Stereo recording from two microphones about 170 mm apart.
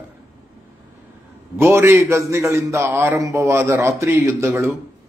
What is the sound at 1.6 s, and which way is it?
A man's voice, 15° right (ahead or behind).